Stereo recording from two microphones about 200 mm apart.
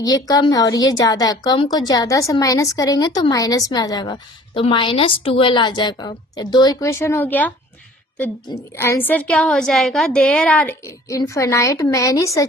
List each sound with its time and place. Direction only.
0.0 s a woman's voice: 20° left (ahead or behind)
8.7 s a woman's voice: 10° left (ahead or behind)
10.8 s a woman's voice: 15° left (ahead or behind)